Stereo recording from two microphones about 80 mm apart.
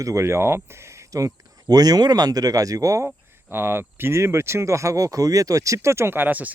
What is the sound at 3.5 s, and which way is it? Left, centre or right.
Speech, right.